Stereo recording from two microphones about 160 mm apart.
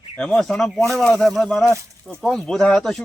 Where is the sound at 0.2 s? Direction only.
5° left (ahead or behind).